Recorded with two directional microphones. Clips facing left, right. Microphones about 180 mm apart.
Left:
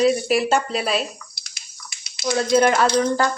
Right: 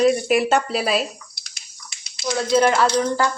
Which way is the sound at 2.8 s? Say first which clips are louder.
Left 1 dB; 25° left (ahead or behind).